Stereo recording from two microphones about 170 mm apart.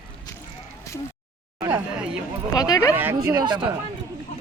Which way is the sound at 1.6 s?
15° right (ahead or behind).